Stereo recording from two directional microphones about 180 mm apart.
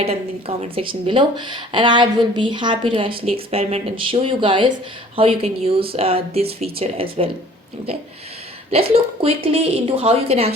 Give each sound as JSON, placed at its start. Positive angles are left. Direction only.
{"t": 0.0, "sound": "a woman's voice", "side_deg": -35}
{"t": 8.7, "sound": "a woman's voice", "side_deg": -30}